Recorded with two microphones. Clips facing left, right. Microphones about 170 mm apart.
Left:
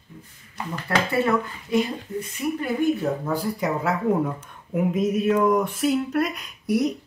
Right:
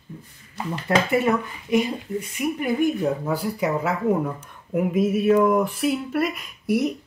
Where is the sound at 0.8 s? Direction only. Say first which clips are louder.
Right 2 dB; 15° right (ahead or behind).